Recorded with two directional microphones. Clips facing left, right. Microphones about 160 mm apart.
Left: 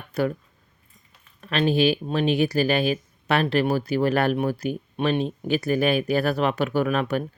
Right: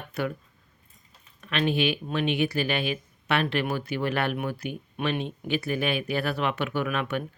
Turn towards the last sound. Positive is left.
turn(degrees=40)  # may be behind; listen again after turning